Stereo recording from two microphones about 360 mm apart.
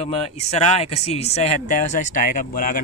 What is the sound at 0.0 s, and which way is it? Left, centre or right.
Speech, centre.